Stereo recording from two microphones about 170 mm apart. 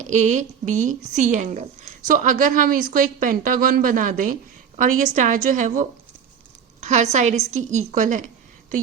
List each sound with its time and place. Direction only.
0.0 s a woman's voice: 45° right (ahead or behind)